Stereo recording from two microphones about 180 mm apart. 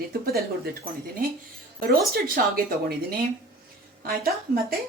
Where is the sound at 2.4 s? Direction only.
55° right (ahead or behind).